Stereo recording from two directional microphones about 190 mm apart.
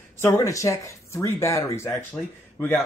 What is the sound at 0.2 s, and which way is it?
Speech, 15° left (ahead or behind).